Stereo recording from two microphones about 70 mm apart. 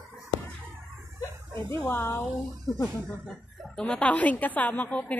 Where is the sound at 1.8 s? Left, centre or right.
Left.